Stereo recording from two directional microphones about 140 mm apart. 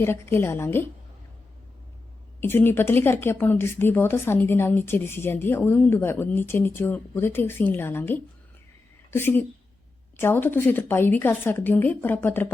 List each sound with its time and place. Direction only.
0.0 s a woman's voice: 15° left (ahead or behind)
2.4 s a woman's voice: 15° left (ahead or behind)